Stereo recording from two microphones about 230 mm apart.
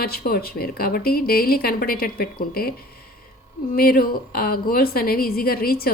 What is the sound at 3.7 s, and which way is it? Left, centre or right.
Speech, left.